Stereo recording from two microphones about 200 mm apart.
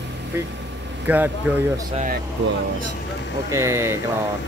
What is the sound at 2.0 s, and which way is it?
Speech, 45° right (ahead or behind).